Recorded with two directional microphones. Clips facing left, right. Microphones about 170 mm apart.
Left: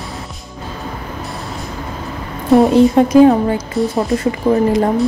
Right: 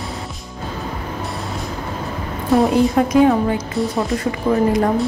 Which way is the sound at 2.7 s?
30° left (ahead or behind).